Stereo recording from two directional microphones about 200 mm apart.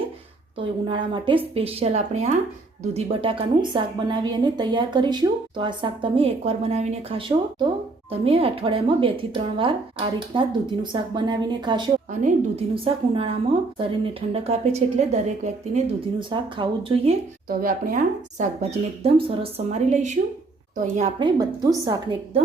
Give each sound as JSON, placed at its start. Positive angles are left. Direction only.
{"t": 0.9, "sound": "a woman's voice", "side_deg": -25}
{"t": 17.5, "sound": "speech", "side_deg": -45}
{"t": 21.2, "sound": "a woman's voice", "side_deg": -20}